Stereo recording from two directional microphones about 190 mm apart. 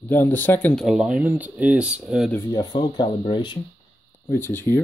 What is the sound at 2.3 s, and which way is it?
Speech, 15° left (ahead or behind).